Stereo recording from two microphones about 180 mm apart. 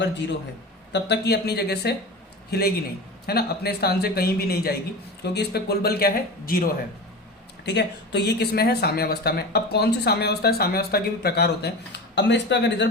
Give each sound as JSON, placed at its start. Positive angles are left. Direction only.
{"t": 0.0, "sound": "a man's voice", "side_deg": 80}
{"t": 7.6, "sound": "speech", "side_deg": 70}